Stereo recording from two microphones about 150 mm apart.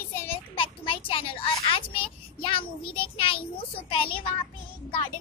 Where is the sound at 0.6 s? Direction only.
35° left (ahead or behind).